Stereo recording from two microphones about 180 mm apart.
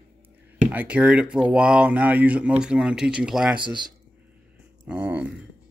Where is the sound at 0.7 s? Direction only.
10° right (ahead or behind).